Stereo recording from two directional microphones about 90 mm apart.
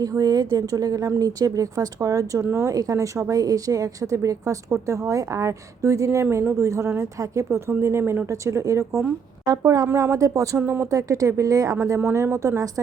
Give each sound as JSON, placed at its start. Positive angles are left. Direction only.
{"t": 0.0, "sound": "speech", "side_deg": -45}
{"t": 10.6, "sound": "speech", "side_deg": -20}
{"t": 10.8, "sound": "speech", "side_deg": -40}